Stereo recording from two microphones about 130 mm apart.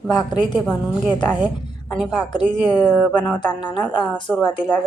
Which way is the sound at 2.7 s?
10° left (ahead or behind).